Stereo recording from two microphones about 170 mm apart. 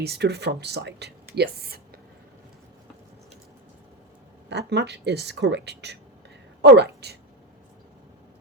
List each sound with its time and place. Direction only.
0.0 s speech: 75° right (ahead or behind)
1.4 s speech: 65° right (ahead or behind)
4.4 s a woman's voice: 85° right